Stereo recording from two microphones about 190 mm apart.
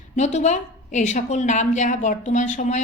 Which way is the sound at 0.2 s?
35° left (ahead or behind).